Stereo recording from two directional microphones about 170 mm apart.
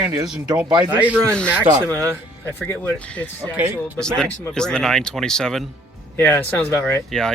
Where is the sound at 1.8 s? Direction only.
5° left (ahead or behind).